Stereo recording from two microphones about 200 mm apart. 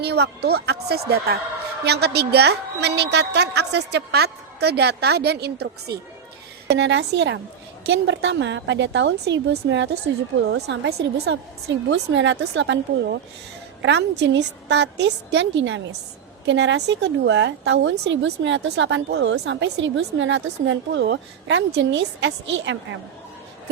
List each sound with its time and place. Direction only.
0.0 s a woman's voice: 55° right (ahead or behind)